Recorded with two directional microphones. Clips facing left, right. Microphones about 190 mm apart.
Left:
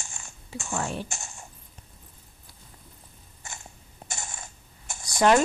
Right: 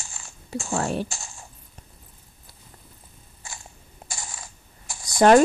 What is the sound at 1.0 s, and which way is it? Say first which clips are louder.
Coin: even; 20° left (ahead or behind).